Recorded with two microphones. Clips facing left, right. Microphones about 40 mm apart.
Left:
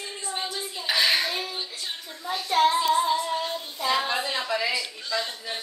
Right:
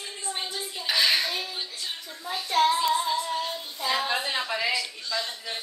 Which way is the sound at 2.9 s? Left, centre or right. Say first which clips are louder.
Left 3 dB; centre.